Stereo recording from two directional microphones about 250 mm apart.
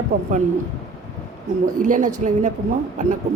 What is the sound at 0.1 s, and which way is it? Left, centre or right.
Speech, right.